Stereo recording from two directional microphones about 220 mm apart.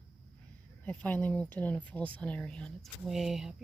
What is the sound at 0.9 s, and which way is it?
Speech, 5° left (ahead or behind).